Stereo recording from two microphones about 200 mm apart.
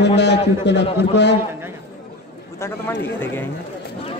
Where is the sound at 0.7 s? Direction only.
60° left (ahead or behind).